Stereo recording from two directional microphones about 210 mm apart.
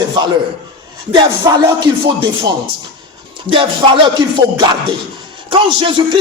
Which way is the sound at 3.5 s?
25° right (ahead or behind).